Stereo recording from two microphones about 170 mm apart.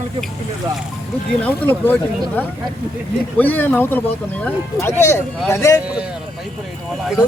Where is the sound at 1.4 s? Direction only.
10° left (ahead or behind).